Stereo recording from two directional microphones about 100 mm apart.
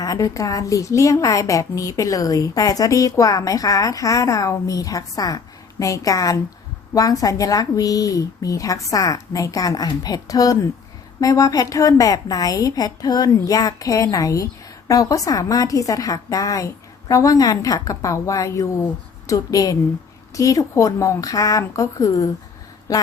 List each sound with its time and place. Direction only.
0.0 s a woman's voice: 35° left (ahead or behind)